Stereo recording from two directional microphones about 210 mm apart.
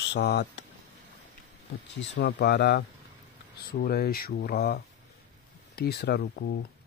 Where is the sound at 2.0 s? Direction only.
55° left (ahead or behind).